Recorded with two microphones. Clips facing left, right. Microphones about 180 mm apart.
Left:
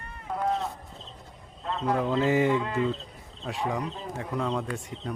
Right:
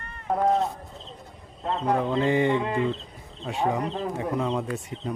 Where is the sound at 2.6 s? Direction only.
20° right (ahead or behind).